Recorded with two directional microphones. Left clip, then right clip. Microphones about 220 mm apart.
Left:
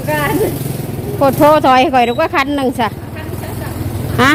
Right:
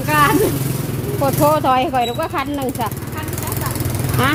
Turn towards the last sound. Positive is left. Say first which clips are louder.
# left 7 dB
turn(degrees=20)  # may be behind; listen again after turning